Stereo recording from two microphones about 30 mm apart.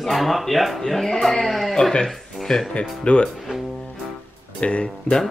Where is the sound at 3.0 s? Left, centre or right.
Left.